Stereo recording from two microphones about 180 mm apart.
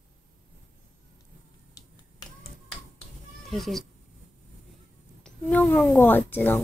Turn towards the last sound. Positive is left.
turn(degrees=10)  # may be behind; listen again after turning